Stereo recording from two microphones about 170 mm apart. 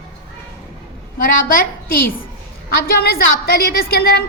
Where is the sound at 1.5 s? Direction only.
60° left (ahead or behind).